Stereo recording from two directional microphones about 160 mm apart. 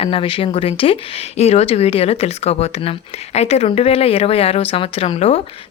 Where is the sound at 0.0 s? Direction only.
35° left (ahead or behind).